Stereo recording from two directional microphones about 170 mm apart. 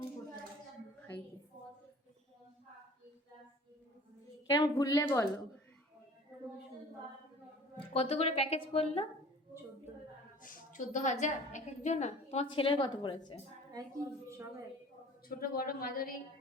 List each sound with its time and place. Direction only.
4.4 s a woman's voice: 20° left (ahead or behind)
7.9 s a woman's voice: 35° left (ahead or behind)
10.4 s a woman's voice: 50° left (ahead or behind); by 13.4 s 30° left (ahead or behind)
13.7 s a woman's voice: 20° right (ahead or behind)
15.3 s speech: 60° left (ahead or behind)